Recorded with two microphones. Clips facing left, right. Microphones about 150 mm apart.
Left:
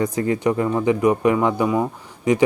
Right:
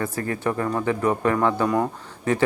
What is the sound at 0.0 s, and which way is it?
Speech, 15° left (ahead or behind).